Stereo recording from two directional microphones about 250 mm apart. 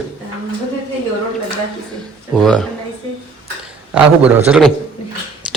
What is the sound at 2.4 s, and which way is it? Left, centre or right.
Speech, centre.